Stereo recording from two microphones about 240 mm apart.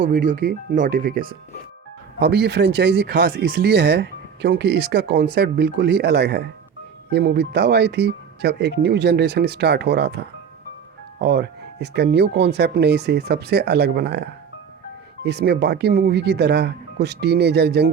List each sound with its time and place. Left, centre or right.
0.0 s speech: right